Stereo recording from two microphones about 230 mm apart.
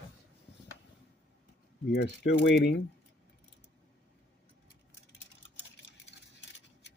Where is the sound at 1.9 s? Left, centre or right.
Left.